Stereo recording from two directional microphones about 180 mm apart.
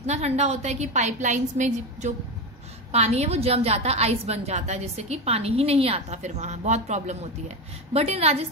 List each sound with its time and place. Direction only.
0.0 s a woman's voice: 40° right (ahead or behind)